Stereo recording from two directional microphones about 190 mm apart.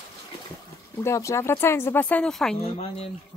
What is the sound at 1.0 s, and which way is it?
Speech, 15° left (ahead or behind).